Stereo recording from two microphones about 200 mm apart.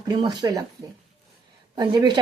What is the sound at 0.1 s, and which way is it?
Speech, 20° right (ahead or behind).